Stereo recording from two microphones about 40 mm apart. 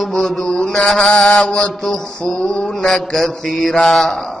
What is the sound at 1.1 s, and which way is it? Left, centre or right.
Mantra, left.